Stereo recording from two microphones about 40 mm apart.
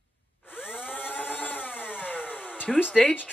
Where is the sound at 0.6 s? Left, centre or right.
Left.